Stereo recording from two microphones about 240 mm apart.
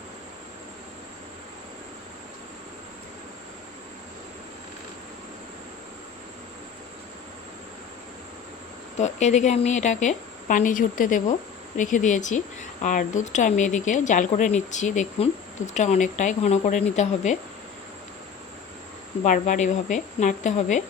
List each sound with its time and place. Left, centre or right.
9.0 s a woman's voice: left
19.2 s speech: left